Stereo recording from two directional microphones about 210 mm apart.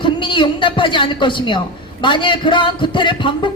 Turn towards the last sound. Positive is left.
turn(degrees=25)  # may be behind; listen again after turning